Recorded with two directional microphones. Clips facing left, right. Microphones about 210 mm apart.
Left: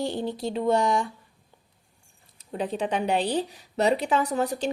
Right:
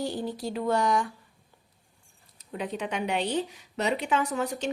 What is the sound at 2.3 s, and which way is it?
A woman's voice, 30° left (ahead or behind).